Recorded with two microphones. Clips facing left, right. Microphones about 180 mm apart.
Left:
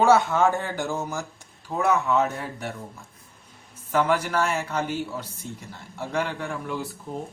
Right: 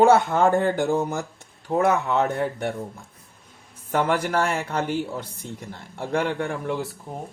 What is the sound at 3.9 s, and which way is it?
Speech, 55° right (ahead or behind).